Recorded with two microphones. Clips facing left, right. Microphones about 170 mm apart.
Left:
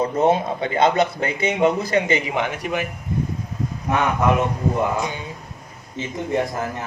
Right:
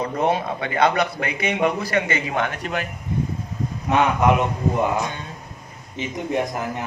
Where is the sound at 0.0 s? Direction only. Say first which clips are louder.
Left 3 dB; 25° left (ahead or behind); by 2.8 s 10° left (ahead or behind).